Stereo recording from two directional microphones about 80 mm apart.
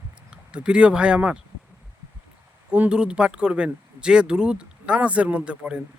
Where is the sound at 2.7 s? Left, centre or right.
Centre.